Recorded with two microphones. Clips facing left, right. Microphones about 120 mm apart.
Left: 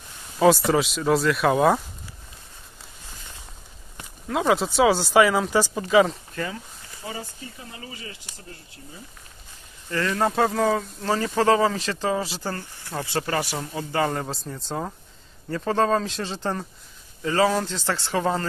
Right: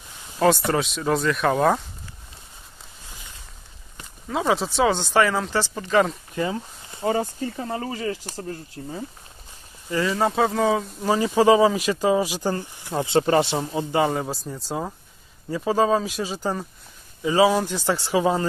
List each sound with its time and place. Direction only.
0.4 s speech: centre (ahead or behind)
4.3 s speech: centre (ahead or behind)
6.3 s a sound: 25° right (ahead or behind)
7.1 s speech: 50° right (ahead or behind)
8.8 s speech: 60° right (ahead or behind)
9.8 s speech: 15° right (ahead or behind)
10.1 s speech: centre (ahead or behind); by 14.1 s 20° right (ahead or behind)
14.1 s speech: 5° right (ahead or behind)